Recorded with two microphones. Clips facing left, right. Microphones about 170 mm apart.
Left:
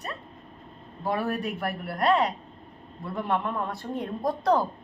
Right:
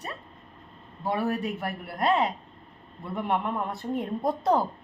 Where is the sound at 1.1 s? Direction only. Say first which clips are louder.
Even; 20° right (ahead or behind).